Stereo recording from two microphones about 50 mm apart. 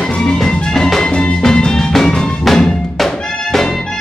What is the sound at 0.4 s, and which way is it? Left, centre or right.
Music, centre.